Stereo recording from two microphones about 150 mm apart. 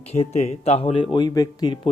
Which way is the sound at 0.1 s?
45° left (ahead or behind).